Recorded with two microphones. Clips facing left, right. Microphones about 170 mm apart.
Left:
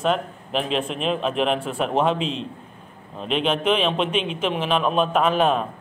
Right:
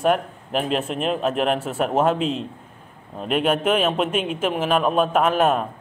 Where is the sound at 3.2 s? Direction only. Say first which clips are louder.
Right 1 dB; 5° right (ahead or behind).